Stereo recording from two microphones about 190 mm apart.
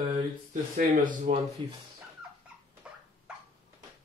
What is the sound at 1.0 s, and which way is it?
Speech, 45° right (ahead or behind).